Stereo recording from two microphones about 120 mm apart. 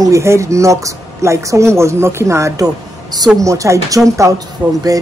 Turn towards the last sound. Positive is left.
turn(degrees=-30)  # may be behind; listen again after turning